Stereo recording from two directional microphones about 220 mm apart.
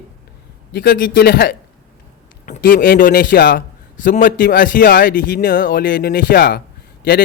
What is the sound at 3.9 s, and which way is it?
A man's voice, 35° left (ahead or behind).